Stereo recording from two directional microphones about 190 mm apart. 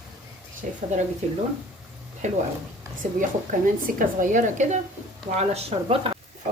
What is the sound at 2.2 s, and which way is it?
A woman's voice, 40° right (ahead or behind).